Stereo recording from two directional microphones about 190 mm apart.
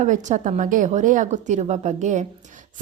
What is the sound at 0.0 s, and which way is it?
A woman's voice, 40° right (ahead or behind).